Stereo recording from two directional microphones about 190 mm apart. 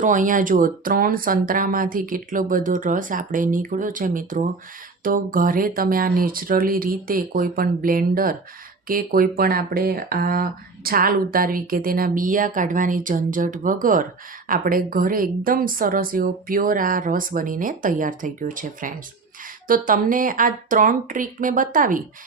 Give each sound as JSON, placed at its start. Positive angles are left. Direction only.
{"t": 0.0, "sound": "speech", "side_deg": -40}